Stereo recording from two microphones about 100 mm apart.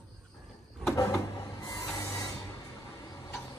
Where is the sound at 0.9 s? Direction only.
35° left (ahead or behind).